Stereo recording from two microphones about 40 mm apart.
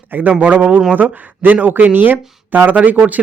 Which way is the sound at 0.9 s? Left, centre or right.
Right.